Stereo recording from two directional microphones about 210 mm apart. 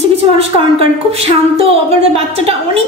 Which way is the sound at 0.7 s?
30° right (ahead or behind).